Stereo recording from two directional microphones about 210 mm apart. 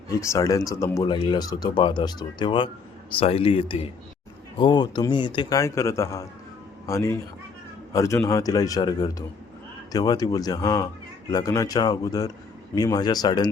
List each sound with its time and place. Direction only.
0.1 s speech: 15° left (ahead or behind)